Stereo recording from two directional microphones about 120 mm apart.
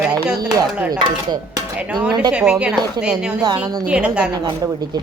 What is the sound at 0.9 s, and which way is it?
Speech, 35° right (ahead or behind).